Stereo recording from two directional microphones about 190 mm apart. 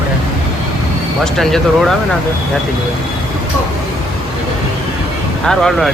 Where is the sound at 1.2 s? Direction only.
Centre (ahead or behind).